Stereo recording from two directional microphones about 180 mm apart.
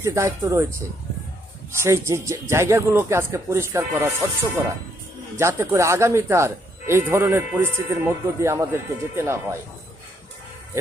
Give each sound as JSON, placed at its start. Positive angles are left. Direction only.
{"t": 0.0, "sound": "speech", "side_deg": -15}
{"t": 1.8, "sound": "speech", "side_deg": -15}